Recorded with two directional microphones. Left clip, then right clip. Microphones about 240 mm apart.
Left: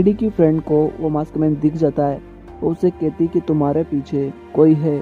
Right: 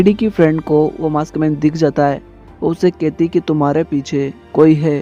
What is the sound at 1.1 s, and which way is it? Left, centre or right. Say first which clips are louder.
Speech: right 3 dB; right.